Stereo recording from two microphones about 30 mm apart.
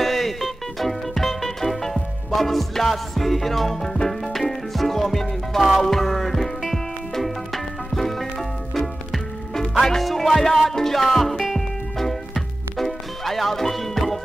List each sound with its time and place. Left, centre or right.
0.0 s music: centre